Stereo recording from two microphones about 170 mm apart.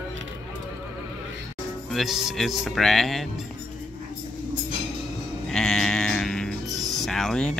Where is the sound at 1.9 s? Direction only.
Centre (ahead or behind).